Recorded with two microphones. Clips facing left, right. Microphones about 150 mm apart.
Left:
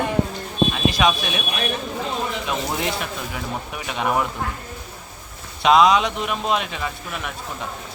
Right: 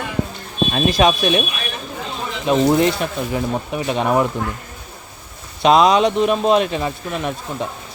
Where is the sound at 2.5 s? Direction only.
30° right (ahead or behind).